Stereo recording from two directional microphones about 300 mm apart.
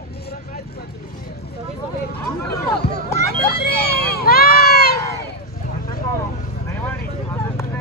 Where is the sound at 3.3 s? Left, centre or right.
Left.